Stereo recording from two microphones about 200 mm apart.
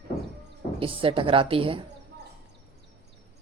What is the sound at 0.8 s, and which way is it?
A woman's voice, 25° right (ahead or behind).